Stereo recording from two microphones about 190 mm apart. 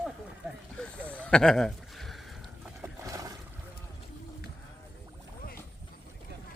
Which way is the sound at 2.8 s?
15° right (ahead or behind).